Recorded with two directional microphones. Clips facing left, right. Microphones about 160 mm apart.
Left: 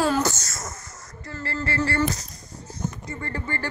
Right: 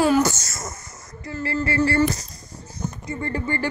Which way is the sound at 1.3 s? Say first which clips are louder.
Right 5 dB; 10° right (ahead or behind).